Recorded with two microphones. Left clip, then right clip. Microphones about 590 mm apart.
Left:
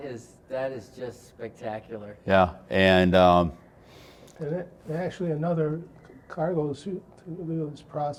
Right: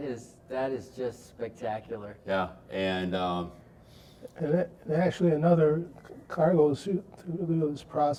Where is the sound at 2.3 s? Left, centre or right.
Left.